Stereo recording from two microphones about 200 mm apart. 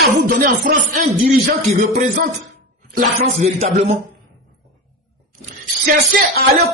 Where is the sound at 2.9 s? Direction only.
35° right (ahead or behind).